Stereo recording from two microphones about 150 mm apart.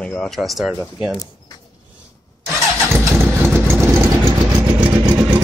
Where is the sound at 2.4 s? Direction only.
5° left (ahead or behind).